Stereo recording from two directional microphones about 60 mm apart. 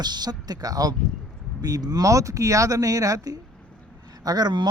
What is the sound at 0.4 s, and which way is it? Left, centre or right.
Speech, right.